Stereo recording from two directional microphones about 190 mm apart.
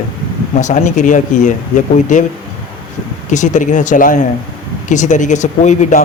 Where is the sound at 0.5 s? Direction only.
40° left (ahead or behind).